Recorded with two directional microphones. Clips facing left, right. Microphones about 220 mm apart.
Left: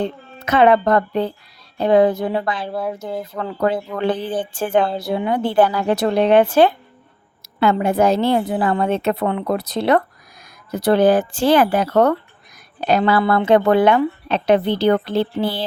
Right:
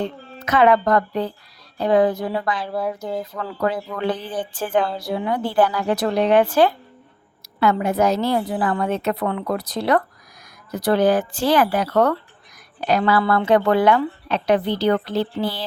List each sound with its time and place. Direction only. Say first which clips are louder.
0.0 s speech: left 3 dB; 25° left (ahead or behind)
3.0 s speech: even; 5° left (ahead or behind)
3.3 s speech: left 6 dB; 25° left (ahead or behind)